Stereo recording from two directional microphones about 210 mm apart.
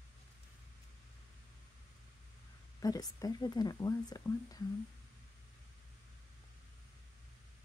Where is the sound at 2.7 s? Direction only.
15° left (ahead or behind).